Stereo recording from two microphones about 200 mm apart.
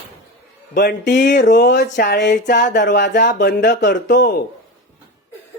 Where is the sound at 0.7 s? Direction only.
55° left (ahead or behind).